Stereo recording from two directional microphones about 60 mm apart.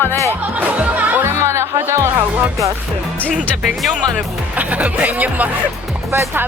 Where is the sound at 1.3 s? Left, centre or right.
Right.